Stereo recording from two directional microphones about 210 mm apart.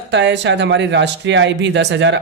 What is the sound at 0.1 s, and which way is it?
A man's voice, 55° right (ahead or behind).